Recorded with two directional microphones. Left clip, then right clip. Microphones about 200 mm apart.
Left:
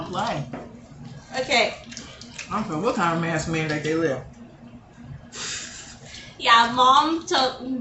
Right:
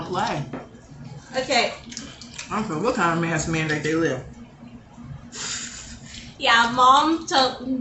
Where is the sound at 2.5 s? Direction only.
20° right (ahead or behind).